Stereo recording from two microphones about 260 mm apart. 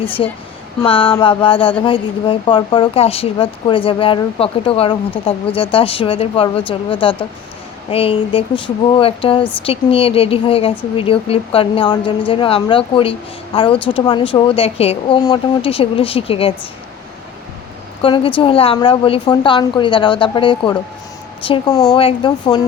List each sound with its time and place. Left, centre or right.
0.8 s speech: left
18.0 s a woman's voice: centre